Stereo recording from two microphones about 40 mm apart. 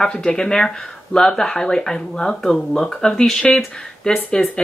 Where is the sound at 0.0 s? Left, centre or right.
Centre.